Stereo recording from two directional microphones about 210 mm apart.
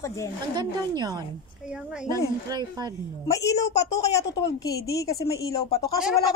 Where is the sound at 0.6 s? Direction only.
20° right (ahead or behind).